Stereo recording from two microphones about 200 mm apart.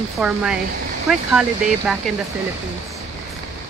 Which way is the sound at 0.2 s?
5° right (ahead or behind).